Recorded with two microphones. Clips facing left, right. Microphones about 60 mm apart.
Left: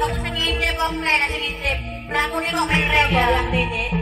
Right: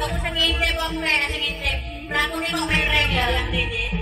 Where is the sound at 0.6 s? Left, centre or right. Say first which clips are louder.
Left 3 dB; left.